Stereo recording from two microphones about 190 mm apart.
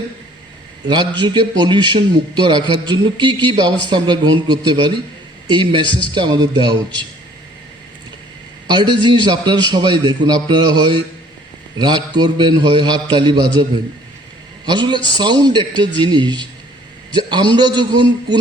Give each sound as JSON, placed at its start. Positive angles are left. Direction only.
{"t": 0.9, "sound": "a man's voice", "side_deg": -25}
{"t": 8.6, "sound": "a man's voice", "side_deg": -25}